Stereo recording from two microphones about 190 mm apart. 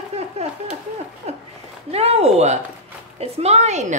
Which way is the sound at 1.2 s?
35° right (ahead or behind).